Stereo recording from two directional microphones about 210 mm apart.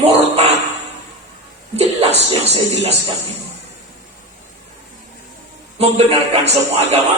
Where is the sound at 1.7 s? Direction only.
30° right (ahead or behind).